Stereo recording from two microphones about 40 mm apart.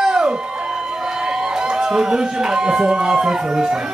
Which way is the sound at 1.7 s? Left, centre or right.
Centre.